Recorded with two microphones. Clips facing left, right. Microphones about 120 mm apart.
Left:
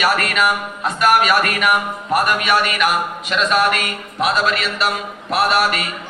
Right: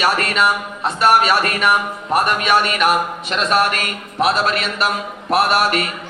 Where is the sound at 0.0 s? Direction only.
30° right (ahead or behind).